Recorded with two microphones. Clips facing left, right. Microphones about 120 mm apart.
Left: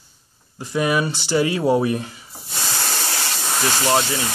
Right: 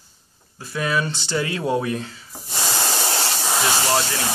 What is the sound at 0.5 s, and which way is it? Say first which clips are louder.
Speech: left 4 dB; 15° left (ahead or behind).